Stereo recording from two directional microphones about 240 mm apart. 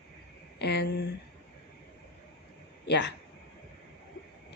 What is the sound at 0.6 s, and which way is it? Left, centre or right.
Speech, left.